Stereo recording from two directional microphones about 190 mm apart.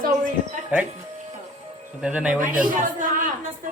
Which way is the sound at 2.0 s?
5° right (ahead or behind).